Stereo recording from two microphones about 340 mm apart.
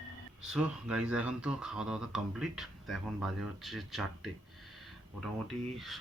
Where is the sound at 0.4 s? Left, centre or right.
Centre.